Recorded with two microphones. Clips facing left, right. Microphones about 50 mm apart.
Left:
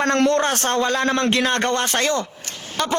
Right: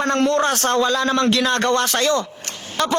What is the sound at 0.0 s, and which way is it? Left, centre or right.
Speech, left.